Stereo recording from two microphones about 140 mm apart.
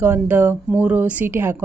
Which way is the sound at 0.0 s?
15° right (ahead or behind).